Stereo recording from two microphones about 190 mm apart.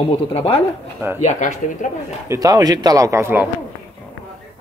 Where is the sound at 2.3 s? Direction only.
20° right (ahead or behind).